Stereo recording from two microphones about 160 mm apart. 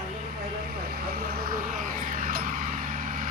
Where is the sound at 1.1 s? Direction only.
70° right (ahead or behind).